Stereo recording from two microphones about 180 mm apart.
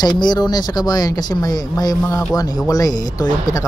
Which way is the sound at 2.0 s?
10° left (ahead or behind).